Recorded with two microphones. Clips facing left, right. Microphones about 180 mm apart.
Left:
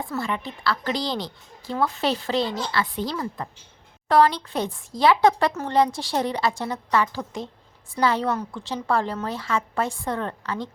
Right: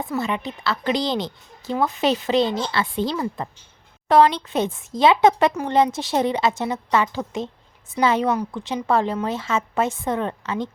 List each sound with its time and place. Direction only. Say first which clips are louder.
0.0 s speech: right 3 dB; 20° right (ahead or behind)